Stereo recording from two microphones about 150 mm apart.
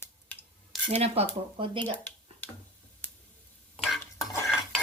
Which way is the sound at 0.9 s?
45° right (ahead or behind).